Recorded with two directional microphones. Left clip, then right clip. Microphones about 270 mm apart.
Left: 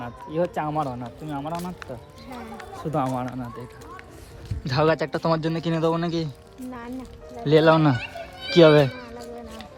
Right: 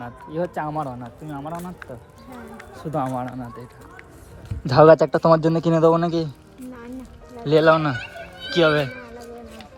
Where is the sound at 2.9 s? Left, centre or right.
Centre.